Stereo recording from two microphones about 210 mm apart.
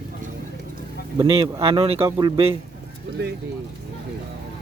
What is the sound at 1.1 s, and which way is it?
Speech, 25° right (ahead or behind).